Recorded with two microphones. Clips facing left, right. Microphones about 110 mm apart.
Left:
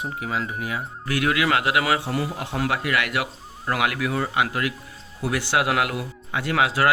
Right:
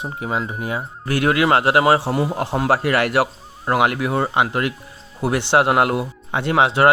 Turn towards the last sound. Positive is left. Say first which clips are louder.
# right 6 dB
turn(degrees=-30)  # may be behind; listen again after turning